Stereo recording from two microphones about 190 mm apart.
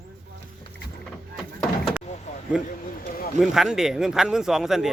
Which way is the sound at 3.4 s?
5° right (ahead or behind).